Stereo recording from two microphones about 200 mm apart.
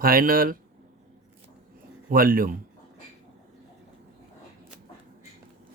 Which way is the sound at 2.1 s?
45° right (ahead or behind).